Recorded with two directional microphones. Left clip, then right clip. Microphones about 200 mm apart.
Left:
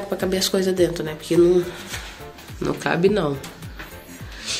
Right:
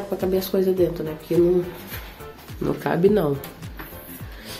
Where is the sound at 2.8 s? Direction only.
15° right (ahead or behind).